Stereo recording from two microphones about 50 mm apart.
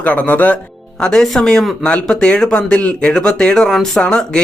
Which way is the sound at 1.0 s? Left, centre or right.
Centre.